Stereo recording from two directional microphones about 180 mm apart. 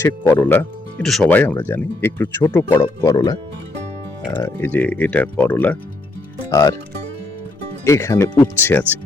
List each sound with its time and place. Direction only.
0.0 s speech: 10° left (ahead or behind)
7.9 s speech: 15° left (ahead or behind)